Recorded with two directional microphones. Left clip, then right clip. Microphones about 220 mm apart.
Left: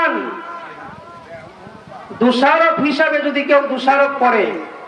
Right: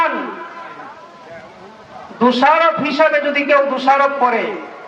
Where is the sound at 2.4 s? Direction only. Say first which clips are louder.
Even; 50° right (ahead or behind).